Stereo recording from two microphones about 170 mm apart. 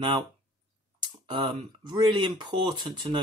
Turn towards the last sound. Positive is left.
turn(degrees=-25)  # may be behind; listen again after turning